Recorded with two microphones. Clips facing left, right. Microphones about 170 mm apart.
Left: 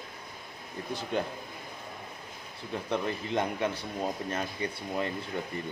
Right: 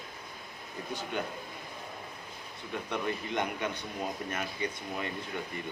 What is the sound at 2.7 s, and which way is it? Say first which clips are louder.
A man's voice: left 2 dB; 30° left (ahead or behind).